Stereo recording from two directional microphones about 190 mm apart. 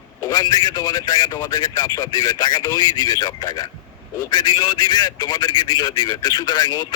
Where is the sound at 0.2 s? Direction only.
20° left (ahead or behind).